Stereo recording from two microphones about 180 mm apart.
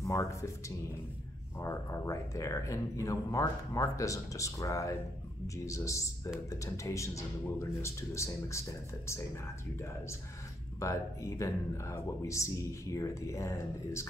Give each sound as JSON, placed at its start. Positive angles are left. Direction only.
{"t": 0.0, "sound": "speech", "side_deg": 15}